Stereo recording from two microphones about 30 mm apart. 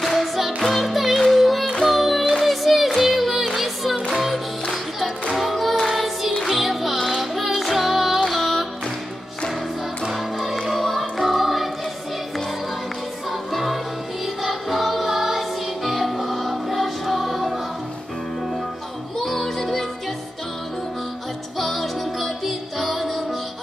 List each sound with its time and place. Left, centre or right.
0.0 s music: centre
5.3 s music: centre
10.1 s music: centre
13.3 s music: centre
19.1 s music: centre
21.5 s music: centre